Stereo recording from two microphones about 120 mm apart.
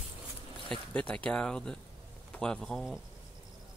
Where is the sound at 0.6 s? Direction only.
10° left (ahead or behind).